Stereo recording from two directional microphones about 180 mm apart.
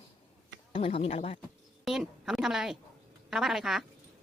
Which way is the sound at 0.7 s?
30° left (ahead or behind).